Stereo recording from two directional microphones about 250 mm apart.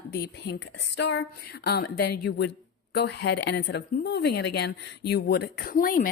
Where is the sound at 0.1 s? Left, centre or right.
Left.